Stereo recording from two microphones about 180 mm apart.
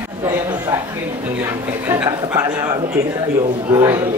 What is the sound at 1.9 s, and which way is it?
Speech, 15° right (ahead or behind).